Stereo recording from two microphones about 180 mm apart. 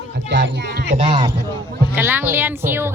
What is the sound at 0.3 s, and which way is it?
Speech, 70° right (ahead or behind).